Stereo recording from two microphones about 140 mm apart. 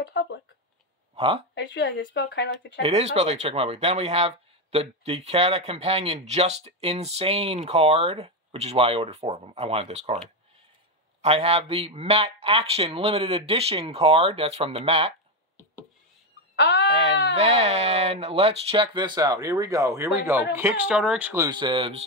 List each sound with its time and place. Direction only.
1.1 s a sound: 40° right (ahead or behind)
2.8 s speech: 50° right (ahead or behind)
11.1 s speech: 45° right (ahead or behind)
16.9 s speech: 50° right (ahead or behind); by 21.4 s 10° right (ahead or behind)
21.4 s speech: 35° right (ahead or behind)